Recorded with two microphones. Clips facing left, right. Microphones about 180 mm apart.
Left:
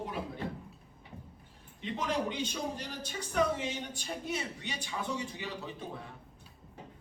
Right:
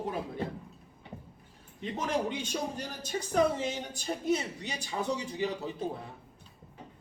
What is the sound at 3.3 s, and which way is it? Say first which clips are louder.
A woman's voice: right 3 dB; 40° right (ahead or behind).